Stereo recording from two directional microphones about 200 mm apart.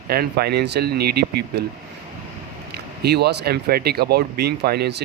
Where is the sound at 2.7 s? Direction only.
55° right (ahead or behind).